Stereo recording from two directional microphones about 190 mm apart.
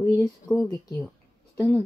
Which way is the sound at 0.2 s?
Centre (ahead or behind).